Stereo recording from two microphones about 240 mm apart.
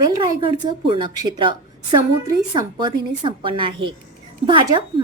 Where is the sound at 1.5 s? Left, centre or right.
Centre.